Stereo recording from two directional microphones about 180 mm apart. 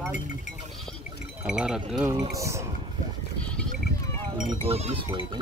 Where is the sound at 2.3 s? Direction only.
15° right (ahead or behind).